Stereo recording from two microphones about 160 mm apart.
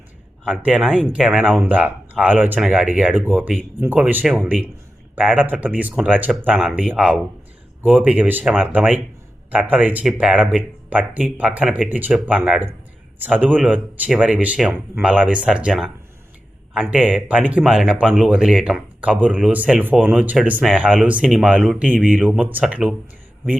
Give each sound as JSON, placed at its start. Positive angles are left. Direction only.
{"t": 0.4, "sound": "speech", "side_deg": -5}
{"t": 6.5, "sound": "speech", "side_deg": 0}
{"t": 17.1, "sound": "speech", "side_deg": -5}